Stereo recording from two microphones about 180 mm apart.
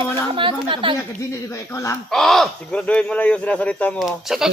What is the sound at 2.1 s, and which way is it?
A man's voice, centre (ahead or behind).